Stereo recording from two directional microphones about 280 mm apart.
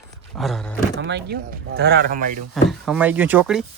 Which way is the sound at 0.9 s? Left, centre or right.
Right.